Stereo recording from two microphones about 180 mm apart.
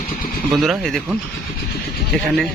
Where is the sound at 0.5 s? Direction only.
Centre (ahead or behind).